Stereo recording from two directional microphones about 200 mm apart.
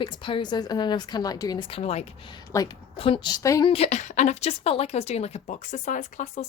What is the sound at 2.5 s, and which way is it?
A woman's voice, 15° left (ahead or behind).